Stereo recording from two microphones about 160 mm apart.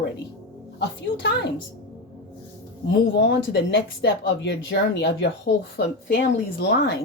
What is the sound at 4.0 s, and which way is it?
Speech, 90° left.